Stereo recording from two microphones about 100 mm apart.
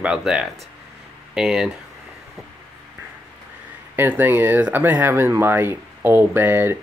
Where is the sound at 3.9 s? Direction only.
20° right (ahead or behind).